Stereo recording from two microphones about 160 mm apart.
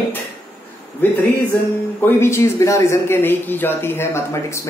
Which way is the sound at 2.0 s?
15° left (ahead or behind).